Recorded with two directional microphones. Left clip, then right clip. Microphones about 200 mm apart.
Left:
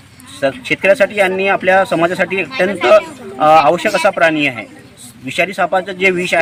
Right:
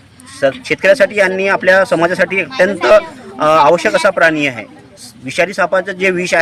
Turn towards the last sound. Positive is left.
turn(degrees=-20)  # may be behind; listen again after turning